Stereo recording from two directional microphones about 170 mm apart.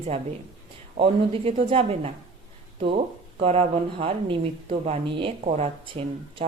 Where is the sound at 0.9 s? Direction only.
35° right (ahead or behind).